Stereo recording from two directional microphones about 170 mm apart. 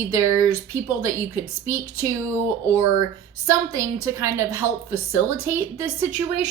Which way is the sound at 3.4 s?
20° right (ahead or behind).